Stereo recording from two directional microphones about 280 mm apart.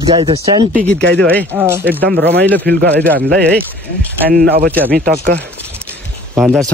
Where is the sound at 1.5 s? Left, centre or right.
Centre.